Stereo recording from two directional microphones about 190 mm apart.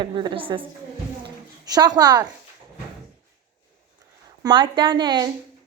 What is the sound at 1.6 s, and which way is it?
Speech, 20° right (ahead or behind).